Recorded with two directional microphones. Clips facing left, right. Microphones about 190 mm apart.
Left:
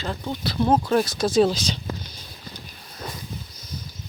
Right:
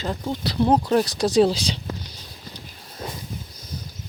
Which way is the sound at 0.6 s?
20° right (ahead or behind).